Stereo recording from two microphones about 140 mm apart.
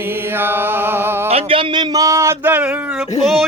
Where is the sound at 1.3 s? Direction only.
40° right (ahead or behind); by 3.1 s 10° right (ahead or behind).